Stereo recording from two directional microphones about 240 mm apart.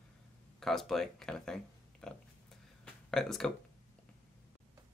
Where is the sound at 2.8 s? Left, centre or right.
Centre.